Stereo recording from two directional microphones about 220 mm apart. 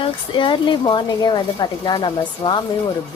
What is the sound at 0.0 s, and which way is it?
A woman's voice, 20° left (ahead or behind).